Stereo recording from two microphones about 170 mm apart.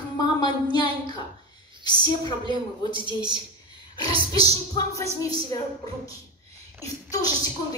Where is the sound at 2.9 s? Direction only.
25° right (ahead or behind).